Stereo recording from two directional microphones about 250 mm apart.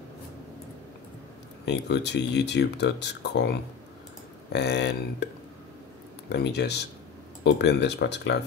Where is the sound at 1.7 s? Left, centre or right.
Left.